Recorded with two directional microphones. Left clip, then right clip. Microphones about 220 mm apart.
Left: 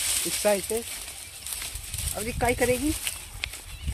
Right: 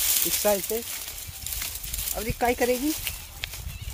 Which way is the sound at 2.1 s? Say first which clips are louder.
Right 1 dB; 10° right (ahead or behind).